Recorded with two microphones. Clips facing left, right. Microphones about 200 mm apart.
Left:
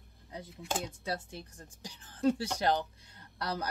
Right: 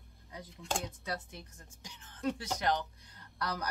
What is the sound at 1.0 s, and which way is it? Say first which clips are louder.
A woman's voice: left 3 dB; 30° left (ahead or behind).